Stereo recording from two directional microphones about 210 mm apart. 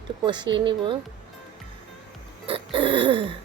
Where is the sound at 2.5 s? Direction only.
25° right (ahead or behind).